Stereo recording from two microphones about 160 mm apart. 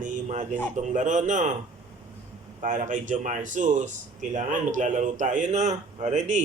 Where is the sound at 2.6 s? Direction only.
50° right (ahead or behind).